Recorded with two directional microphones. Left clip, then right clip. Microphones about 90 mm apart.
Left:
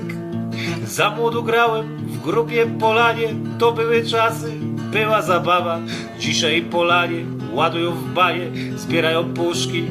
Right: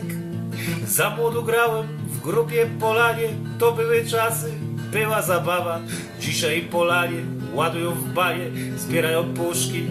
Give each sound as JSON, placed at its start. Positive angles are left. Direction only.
{"t": 0.9, "sound": "music", "side_deg": 25}